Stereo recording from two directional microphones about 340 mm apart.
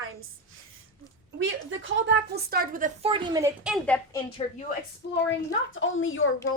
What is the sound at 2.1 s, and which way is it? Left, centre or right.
A woman's voice, right.